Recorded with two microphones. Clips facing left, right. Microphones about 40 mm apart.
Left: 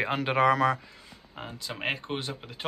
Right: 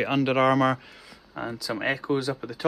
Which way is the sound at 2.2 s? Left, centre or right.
Left.